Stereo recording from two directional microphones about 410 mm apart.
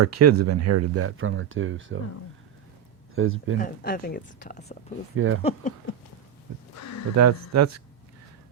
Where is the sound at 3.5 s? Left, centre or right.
Left.